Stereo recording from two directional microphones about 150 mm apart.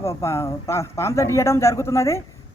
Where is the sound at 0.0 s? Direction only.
20° left (ahead or behind).